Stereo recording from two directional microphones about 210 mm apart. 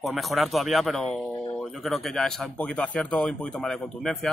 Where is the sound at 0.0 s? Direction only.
Centre (ahead or behind).